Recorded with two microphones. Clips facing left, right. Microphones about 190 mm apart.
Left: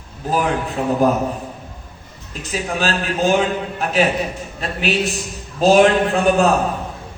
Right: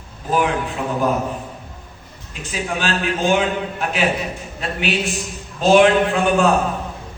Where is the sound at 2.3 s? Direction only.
40° left (ahead or behind).